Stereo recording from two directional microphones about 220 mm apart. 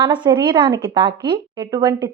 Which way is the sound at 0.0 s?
20° right (ahead or behind).